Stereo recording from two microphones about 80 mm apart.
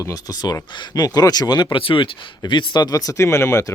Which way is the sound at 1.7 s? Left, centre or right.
Left.